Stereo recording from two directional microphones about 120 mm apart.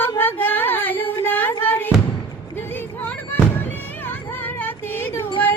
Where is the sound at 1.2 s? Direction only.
15° left (ahead or behind).